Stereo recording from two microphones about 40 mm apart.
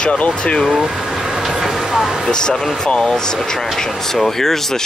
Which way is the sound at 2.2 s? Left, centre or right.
Centre.